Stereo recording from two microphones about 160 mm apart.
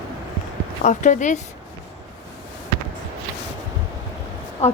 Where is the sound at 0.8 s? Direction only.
50° left (ahead or behind).